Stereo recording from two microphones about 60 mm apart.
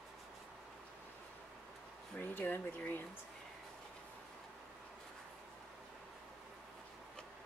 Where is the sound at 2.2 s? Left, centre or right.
Left.